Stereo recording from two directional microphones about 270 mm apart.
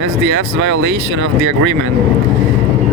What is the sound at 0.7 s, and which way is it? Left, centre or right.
Speech, right.